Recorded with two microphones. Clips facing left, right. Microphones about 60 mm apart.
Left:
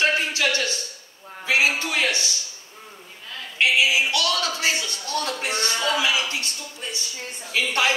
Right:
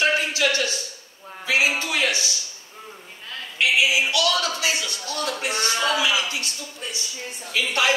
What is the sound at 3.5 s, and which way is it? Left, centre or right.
A man's voice, left.